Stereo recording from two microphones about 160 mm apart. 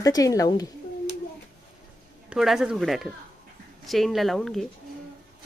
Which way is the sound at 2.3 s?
Centre (ahead or behind).